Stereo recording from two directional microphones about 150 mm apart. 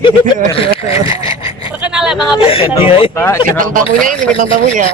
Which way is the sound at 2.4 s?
40° left (ahead or behind).